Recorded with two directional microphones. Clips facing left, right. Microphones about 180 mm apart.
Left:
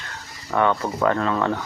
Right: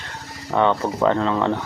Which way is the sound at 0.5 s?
20° right (ahead or behind).